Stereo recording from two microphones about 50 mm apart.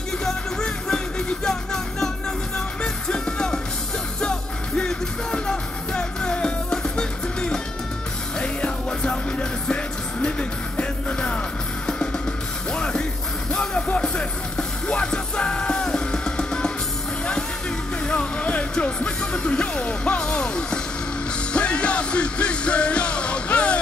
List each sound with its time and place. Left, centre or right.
0.2 s music: centre
10.8 s music: centre
18.0 s music: left